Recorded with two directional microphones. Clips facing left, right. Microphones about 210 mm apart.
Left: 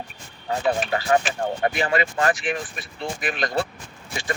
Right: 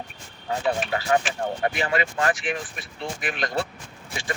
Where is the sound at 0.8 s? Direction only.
40° left (ahead or behind).